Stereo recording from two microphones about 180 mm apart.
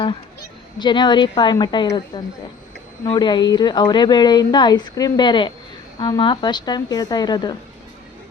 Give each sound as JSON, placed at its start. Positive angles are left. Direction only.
{"t": 0.8, "sound": "a woman's voice", "side_deg": 25}